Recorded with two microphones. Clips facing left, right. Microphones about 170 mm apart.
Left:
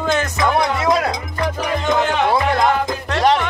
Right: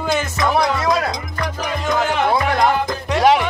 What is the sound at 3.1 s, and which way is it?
Music, 5° right (ahead or behind).